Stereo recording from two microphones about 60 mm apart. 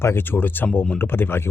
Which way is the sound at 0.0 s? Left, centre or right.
Left.